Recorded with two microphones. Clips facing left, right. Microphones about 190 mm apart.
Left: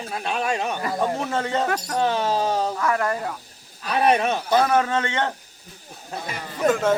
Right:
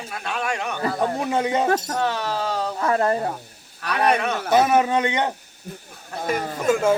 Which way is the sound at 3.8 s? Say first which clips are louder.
Left 1 dB; 65° right (ahead or behind).